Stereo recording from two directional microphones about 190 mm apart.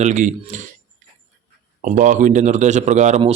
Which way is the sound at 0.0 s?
40° right (ahead or behind).